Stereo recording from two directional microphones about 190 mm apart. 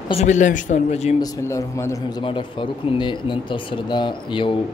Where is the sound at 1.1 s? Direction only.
15° left (ahead or behind).